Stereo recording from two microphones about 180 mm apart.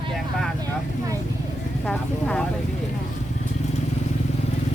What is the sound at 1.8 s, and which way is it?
Speech, 5° left (ahead or behind).